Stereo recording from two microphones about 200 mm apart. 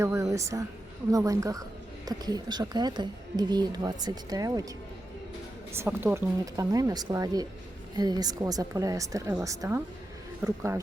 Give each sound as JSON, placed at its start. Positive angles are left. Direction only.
{"t": 0.0, "sound": "speech", "side_deg": -15}
{"t": 5.7, "sound": "speech", "side_deg": -10}